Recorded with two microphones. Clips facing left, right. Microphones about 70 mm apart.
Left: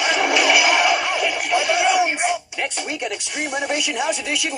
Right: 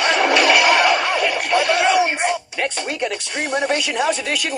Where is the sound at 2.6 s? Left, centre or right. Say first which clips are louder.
Right 3 dB; right.